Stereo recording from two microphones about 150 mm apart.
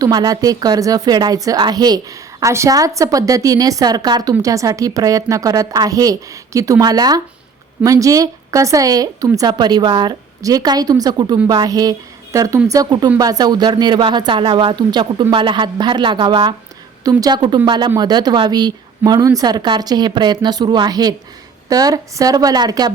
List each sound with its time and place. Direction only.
0.0 s a woman's voice: 25° right (ahead or behind)